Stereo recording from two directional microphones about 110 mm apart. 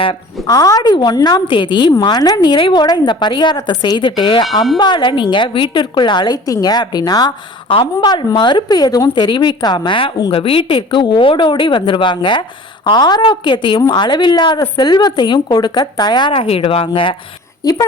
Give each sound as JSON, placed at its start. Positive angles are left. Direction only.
{"t": 0.4, "sound": "a woman's voice", "side_deg": 35}
{"t": 17.6, "sound": "a woman's voice", "side_deg": 30}